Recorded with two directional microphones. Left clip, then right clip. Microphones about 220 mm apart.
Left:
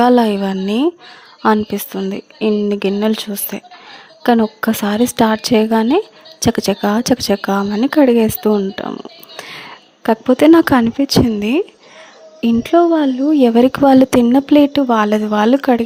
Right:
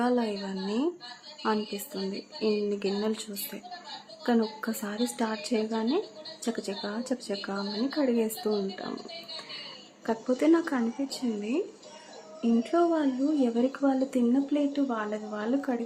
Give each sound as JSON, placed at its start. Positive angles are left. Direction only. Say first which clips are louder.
{"t": 0.0, "sound": "speech", "louder": "left 16 dB", "side_deg": 45}
{"t": 2.0, "sound": "speech", "louder": "left 11 dB", "side_deg": 40}
{"t": 10.0, "sound": "speech", "louder": "left 16 dB", "side_deg": 45}